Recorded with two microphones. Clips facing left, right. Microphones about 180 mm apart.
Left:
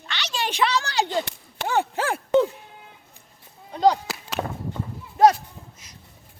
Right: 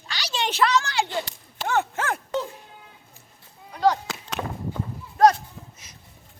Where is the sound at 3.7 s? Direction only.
20° left (ahead or behind).